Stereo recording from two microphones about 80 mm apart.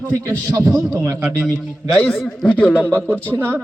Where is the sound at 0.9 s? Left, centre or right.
Right.